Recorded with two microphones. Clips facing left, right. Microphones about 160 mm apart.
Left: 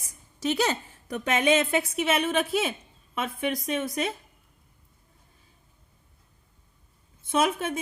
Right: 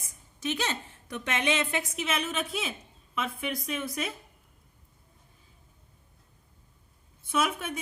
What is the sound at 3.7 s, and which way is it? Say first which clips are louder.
Speech: left 5 dB; 30° left (ahead or behind).